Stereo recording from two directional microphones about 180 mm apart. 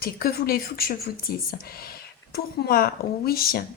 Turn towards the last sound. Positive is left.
turn(degrees=55)  # may be behind; listen again after turning